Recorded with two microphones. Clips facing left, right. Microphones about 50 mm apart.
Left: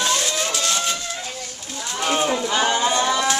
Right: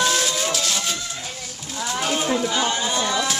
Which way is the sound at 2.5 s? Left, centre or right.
Left.